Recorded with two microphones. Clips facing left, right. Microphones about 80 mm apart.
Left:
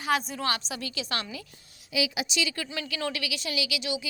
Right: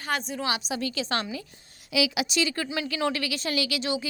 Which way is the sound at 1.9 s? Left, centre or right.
Right.